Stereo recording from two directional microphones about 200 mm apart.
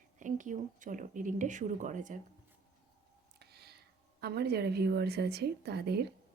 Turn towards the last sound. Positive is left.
turn(degrees=-55)  # may be behind; listen again after turning